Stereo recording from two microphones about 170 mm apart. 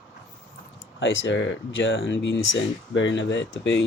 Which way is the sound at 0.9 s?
90° left.